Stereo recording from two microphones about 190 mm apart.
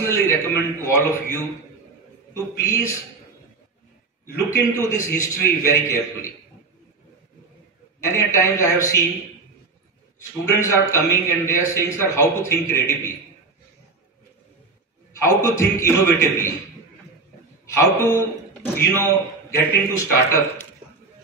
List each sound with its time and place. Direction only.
0.0 s a man's voice: 15° left (ahead or behind)
2.6 s a man's voice: 15° left (ahead or behind)
4.5 s a man's voice: 15° left (ahead or behind)
8.0 s a man's voice: 15° left (ahead or behind)
10.6 s a man's voice: 15° left (ahead or behind)
15.2 s a man's voice: 15° left (ahead or behind)
17.7 s a man's voice: 15° left (ahead or behind)